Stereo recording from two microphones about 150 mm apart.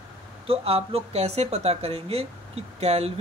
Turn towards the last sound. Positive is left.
turn(degrees=-45)  # may be behind; listen again after turning